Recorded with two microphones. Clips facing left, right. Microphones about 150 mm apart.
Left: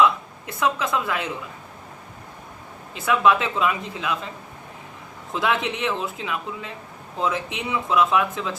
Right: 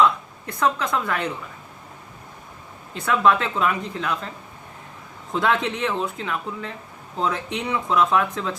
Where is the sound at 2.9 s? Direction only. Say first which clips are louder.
Even; 5° left (ahead or behind).